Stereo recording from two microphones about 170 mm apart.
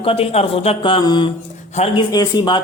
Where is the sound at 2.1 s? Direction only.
25° left (ahead or behind).